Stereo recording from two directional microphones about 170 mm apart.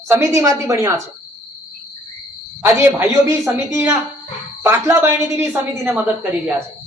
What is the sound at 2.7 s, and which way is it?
Speech, 15° right (ahead or behind).